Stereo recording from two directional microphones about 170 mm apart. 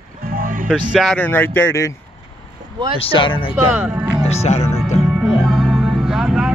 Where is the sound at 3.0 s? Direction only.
30° left (ahead or behind).